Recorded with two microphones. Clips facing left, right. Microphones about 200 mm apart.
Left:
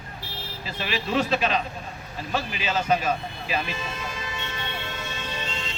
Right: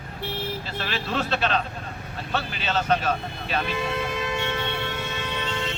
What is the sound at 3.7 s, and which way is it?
Music, 60° right (ahead or behind).